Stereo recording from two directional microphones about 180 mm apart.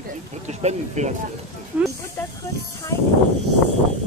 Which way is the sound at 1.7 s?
10° right (ahead or behind).